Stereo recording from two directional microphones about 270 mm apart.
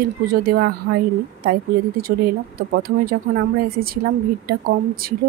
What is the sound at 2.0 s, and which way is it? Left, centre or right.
Speech, right.